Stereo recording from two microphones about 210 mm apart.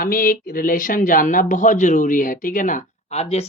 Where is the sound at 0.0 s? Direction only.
45° left (ahead or behind).